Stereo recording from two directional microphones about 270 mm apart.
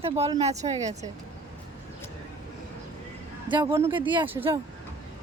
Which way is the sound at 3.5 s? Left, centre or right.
Centre.